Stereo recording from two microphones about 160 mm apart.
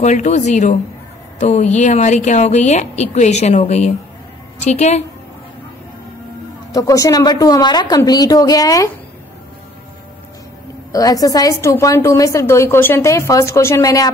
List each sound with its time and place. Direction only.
0.0 s speech: 45° left (ahead or behind)
6.7 s a woman's voice: 20° left (ahead or behind)
10.9 s a woman's voice: 20° left (ahead or behind)